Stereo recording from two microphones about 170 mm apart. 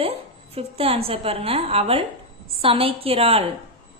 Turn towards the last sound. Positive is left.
turn(degrees=-35)  # may be behind; listen again after turning